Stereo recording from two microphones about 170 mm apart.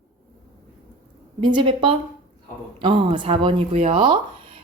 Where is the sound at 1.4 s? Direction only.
25° right (ahead or behind).